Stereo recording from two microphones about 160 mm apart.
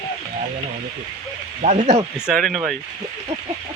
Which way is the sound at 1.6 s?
45° right (ahead or behind).